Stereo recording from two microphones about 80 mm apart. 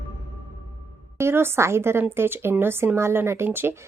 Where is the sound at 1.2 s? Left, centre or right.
Right.